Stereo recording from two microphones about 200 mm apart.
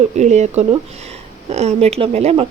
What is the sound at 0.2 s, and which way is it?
Speech, 35° right (ahead or behind).